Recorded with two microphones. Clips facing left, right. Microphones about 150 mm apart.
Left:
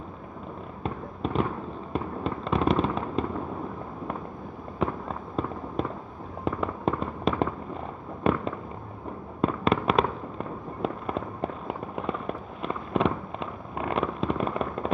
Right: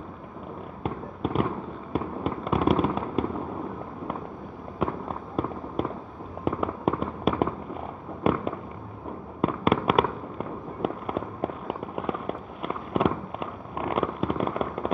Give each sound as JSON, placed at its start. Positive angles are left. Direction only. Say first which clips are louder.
{"t": 0.8, "sound": "fireworks", "louder": "right 1 dB", "side_deg": -10}
{"t": 4.7, "sound": "fireworks", "louder": "even", "side_deg": -10}